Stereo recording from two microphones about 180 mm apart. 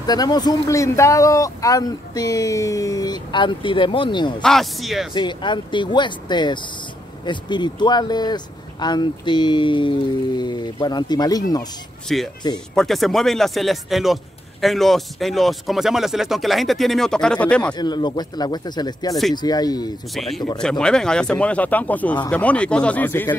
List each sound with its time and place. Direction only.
0.0 s speech: 20° left (ahead or behind)
4.4 s speech: centre (ahead or behind)
5.1 s speech: 25° left (ahead or behind)
12.1 s speech: centre (ahead or behind)
17.7 s speech: 25° left (ahead or behind)
20.2 s speech: centre (ahead or behind)